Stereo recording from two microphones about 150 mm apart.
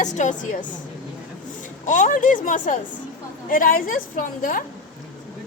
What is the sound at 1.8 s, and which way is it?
A woman's voice, 60° left (ahead or behind).